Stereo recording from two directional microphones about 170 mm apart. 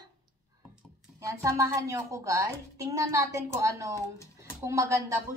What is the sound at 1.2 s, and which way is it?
A woman's voice, 20° right (ahead or behind).